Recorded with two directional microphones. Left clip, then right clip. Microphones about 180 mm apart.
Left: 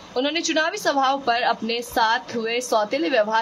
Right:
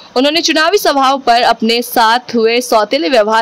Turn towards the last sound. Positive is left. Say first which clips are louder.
# right 10 dB
turn(degrees=-60)  # may be behind; listen again after turning